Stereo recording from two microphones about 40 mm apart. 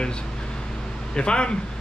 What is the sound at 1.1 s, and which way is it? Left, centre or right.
Speech, left.